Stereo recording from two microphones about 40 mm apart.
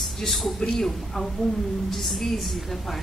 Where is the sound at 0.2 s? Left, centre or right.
Centre.